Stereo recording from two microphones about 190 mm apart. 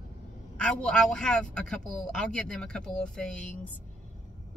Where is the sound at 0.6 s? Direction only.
5° left (ahead or behind).